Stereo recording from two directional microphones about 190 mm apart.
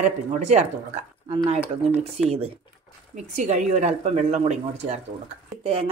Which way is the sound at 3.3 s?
35° right (ahead or behind).